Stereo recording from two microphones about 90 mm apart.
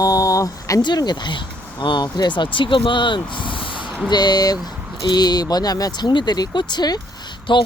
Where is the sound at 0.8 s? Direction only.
55° left (ahead or behind).